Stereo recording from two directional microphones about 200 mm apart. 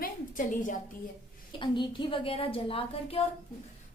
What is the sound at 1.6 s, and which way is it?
A woman's voice, 25° left (ahead or behind).